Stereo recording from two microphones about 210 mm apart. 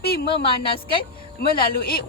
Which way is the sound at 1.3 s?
45° left (ahead or behind).